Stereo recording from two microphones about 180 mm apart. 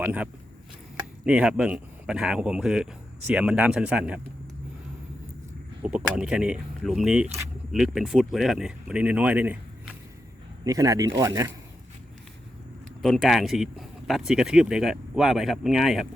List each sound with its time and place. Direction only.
0.0 s speech: 5° right (ahead or behind)
5.8 s a man's voice: 5° right (ahead or behind)
13.0 s speech: centre (ahead or behind)